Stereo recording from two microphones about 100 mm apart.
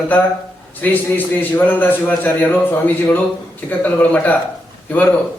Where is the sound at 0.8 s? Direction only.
20° left (ahead or behind).